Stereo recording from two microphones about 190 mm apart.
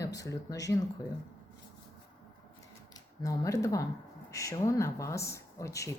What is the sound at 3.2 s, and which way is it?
Speech, 15° left (ahead or behind).